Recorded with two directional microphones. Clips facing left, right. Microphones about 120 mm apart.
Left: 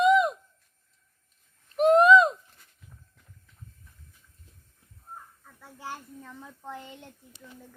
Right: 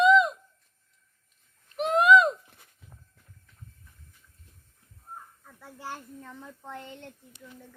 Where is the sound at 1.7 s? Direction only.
40° left (ahead or behind).